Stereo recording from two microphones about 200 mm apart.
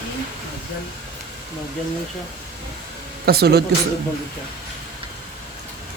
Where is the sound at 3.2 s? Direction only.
50° right (ahead or behind).